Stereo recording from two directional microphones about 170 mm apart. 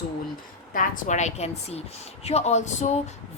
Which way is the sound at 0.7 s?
50° left (ahead or behind).